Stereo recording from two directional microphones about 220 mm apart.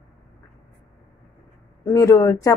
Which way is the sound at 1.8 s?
15° left (ahead or behind).